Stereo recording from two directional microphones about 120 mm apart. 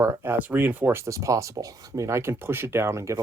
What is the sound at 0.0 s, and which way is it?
Speech, 20° right (ahead or behind).